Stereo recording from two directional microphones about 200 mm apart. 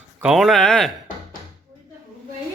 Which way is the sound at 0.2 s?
Centre (ahead or behind).